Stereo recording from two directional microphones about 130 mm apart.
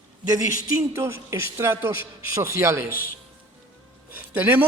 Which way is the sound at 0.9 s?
20° right (ahead or behind).